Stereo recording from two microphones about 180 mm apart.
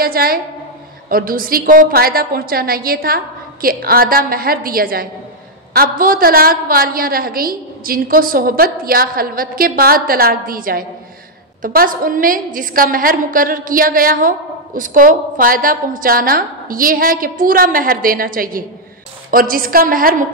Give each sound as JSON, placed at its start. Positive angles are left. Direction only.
{"t": 0.0, "sound": "a woman's voice", "side_deg": -55}